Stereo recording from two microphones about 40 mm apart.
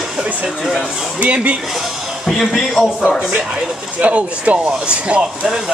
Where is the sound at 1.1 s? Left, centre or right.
Right.